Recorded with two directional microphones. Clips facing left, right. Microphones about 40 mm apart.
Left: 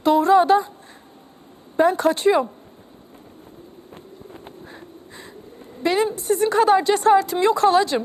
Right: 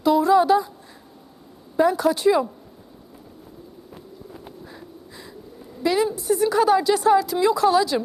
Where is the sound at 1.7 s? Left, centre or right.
Left.